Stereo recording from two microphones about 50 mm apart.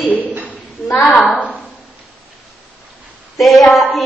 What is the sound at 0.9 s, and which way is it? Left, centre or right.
Speech, left.